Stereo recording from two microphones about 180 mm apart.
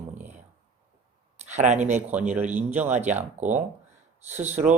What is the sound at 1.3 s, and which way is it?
Speech, 40° right (ahead or behind).